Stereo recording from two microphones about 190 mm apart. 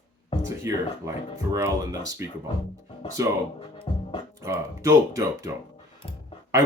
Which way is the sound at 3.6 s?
30° left (ahead or behind).